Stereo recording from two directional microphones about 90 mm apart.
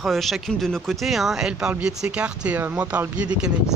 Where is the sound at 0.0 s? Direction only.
Centre (ahead or behind).